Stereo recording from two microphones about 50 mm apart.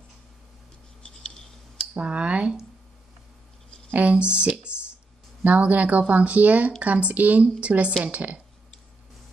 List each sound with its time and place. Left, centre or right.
1.0 s writing: centre
2.0 s speech: right
3.9 s speech: right
4.7 s a sound: right
5.4 s a woman's voice: right